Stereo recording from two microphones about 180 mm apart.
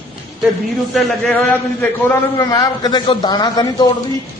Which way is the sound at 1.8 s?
15° left (ahead or behind).